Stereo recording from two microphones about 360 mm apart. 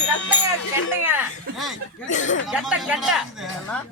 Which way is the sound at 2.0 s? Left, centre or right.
Left.